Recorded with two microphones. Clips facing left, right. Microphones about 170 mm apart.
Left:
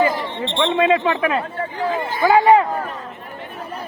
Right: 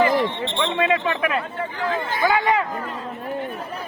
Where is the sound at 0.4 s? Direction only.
30° left (ahead or behind).